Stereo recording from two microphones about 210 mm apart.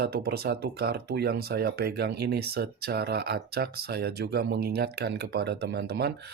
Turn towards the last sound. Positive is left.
turn(degrees=-50)  # may be behind; listen again after turning